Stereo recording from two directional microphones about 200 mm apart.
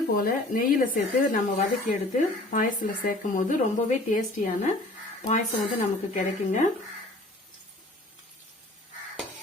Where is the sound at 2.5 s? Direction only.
40° left (ahead or behind).